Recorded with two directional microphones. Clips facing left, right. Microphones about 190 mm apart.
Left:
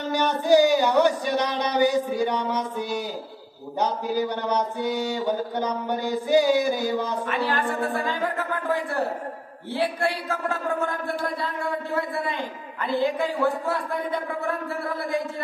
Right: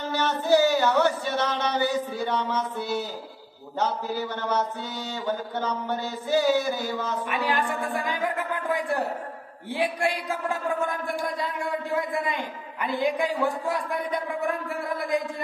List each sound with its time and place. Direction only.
0.1 s a man's voice: 15° left (ahead or behind)
7.2 s a man's voice: 15° right (ahead or behind)
9.8 s a man's voice: 15° right (ahead or behind)
12.8 s a man's voice: 15° right (ahead or behind)